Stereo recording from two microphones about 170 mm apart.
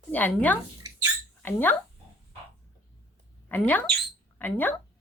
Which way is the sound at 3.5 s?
10° left (ahead or behind).